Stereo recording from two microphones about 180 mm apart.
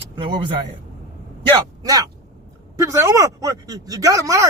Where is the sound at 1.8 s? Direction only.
20° right (ahead or behind).